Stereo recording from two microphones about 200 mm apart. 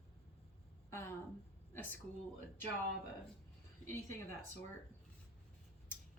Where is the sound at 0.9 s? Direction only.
10° left (ahead or behind).